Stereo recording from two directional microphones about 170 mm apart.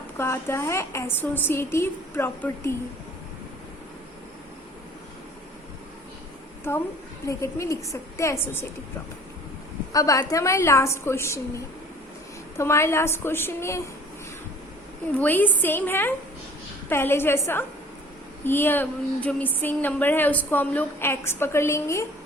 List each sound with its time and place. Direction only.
0.2 s speech: 15° left (ahead or behind)
7.3 s speech: 15° left (ahead or behind)
9.9 s speech: 20° left (ahead or behind)
15.2 s speech: 10° left (ahead or behind)